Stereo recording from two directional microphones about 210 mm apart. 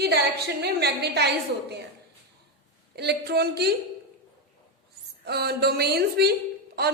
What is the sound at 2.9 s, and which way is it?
Speech, 50° right (ahead or behind).